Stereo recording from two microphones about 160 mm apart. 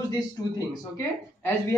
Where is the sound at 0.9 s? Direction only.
15° left (ahead or behind).